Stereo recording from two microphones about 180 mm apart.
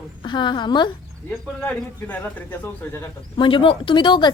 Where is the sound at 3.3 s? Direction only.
30° left (ahead or behind).